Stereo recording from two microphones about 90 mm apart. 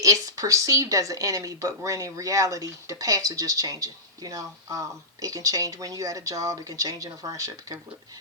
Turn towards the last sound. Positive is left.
turn(degrees=-40)  # may be behind; listen again after turning